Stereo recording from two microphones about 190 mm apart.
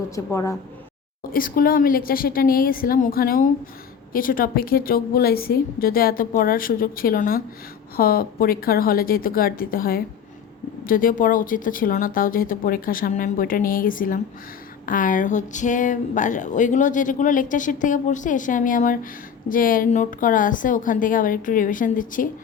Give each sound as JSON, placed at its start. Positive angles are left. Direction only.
{"t": 0.3, "sound": "speech", "side_deg": 15}
{"t": 1.3, "sound": "speech", "side_deg": 50}